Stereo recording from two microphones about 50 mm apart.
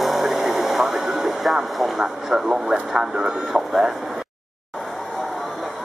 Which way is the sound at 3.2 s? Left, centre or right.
Centre.